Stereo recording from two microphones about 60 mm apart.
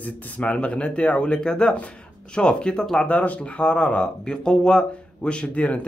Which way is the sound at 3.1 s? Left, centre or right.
Left.